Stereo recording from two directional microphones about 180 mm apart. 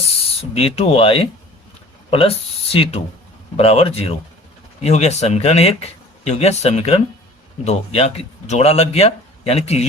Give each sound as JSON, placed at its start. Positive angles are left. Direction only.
{"t": 0.1, "sound": "speech", "side_deg": 35}